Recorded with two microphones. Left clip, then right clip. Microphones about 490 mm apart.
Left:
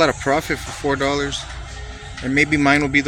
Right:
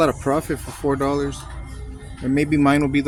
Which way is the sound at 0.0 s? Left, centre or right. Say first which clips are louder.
Left 2 dB; right.